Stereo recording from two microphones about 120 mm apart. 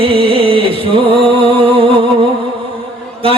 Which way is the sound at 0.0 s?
50° right (ahead or behind).